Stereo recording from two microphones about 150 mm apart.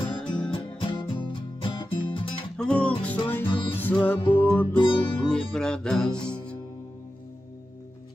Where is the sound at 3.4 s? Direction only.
35° left (ahead or behind).